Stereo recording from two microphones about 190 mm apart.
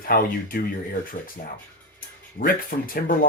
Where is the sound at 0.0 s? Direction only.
50° left (ahead or behind).